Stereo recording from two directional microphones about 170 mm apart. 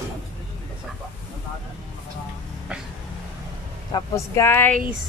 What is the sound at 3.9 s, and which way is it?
Speech, 20° left (ahead or behind).